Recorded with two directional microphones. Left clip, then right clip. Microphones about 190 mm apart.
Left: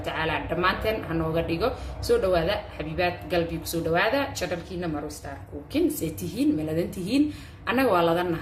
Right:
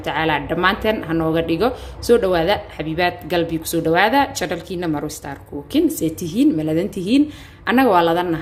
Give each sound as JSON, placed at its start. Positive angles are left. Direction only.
{"t": 0.0, "sound": "speech", "side_deg": -40}